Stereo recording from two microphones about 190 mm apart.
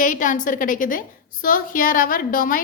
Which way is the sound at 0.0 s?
45° left (ahead or behind).